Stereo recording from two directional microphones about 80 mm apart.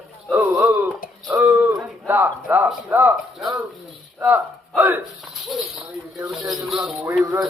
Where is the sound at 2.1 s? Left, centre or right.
Right.